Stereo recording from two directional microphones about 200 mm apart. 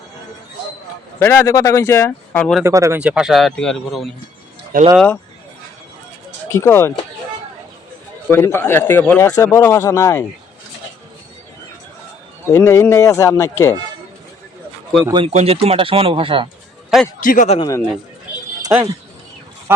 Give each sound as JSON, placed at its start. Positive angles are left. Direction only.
{"t": 1.2, "sound": "a man's voice", "side_deg": 15}
{"t": 2.6, "sound": "a man's voice", "side_deg": -15}
{"t": 6.5, "sound": "a man's voice", "side_deg": 15}
{"t": 8.3, "sound": "a man's voice", "side_deg": 10}
{"t": 12.5, "sound": "a man's voice", "side_deg": 15}
{"t": 15.0, "sound": "speech", "side_deg": -25}
{"t": 17.2, "sound": "a man's voice", "side_deg": 40}
{"t": 17.6, "sound": "a man's voice", "side_deg": 15}
{"t": 18.7, "sound": "speech", "side_deg": -10}